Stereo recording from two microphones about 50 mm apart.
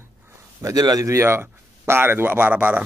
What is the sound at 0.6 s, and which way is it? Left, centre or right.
Speech, right.